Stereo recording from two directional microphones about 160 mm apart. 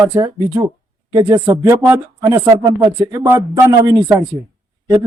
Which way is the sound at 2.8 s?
30° right (ahead or behind).